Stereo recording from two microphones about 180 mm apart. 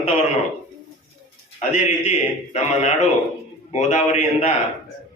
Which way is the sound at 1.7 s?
40° left (ahead or behind).